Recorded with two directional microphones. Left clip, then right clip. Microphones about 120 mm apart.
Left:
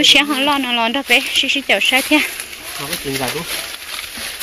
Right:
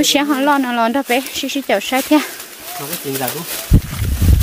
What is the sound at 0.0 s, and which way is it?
Speech, 80° right.